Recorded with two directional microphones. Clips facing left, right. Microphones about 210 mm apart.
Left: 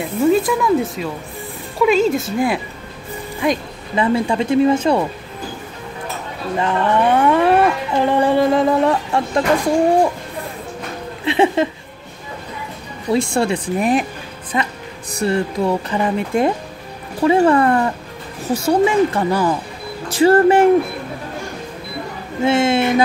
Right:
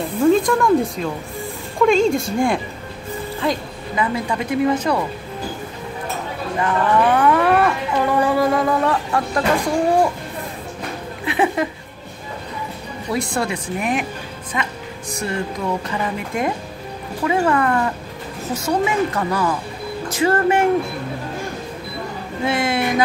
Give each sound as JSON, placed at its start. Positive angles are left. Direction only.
{"t": 0.0, "sound": "speech", "side_deg": 5}
{"t": 3.4, "sound": "speech", "side_deg": 15}
{"t": 3.9, "sound": "speech", "side_deg": 30}
{"t": 6.6, "sound": "speech", "side_deg": 25}
{"t": 11.2, "sound": "speech", "side_deg": 25}
{"t": 13.1, "sound": "speech", "side_deg": 25}
{"t": 22.4, "sound": "speech", "side_deg": 25}